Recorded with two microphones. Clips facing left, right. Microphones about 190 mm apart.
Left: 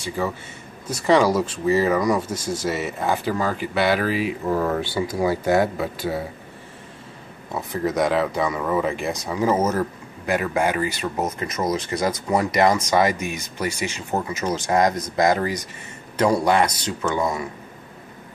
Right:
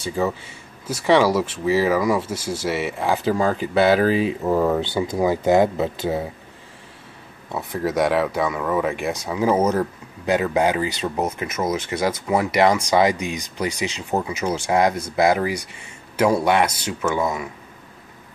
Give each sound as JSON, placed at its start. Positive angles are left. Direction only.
{"t": 0.8, "sound": "speech", "side_deg": -5}
{"t": 3.3, "sound": "speech", "side_deg": -20}
{"t": 4.5, "sound": "speech", "side_deg": -15}
{"t": 7.5, "sound": "speech", "side_deg": -5}